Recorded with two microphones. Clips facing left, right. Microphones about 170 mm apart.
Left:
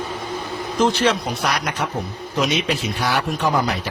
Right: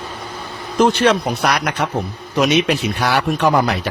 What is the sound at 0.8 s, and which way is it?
A man's voice, 65° right (ahead or behind).